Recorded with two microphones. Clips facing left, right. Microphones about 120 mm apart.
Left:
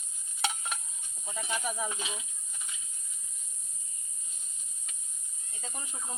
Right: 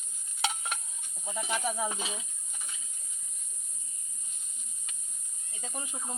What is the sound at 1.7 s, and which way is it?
Speech, 35° right (ahead or behind).